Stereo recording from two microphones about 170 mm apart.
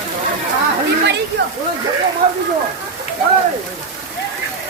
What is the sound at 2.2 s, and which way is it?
Speech, 50° right (ahead or behind).